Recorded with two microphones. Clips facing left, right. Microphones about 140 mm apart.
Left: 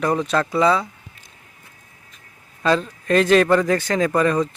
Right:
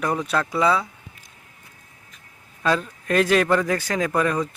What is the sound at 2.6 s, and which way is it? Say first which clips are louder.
Speech: left 3 dB; 5° right (ahead or behind).